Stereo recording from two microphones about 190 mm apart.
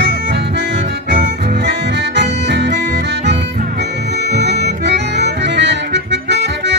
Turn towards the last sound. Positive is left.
turn(degrees=-65)  # may be behind; listen again after turning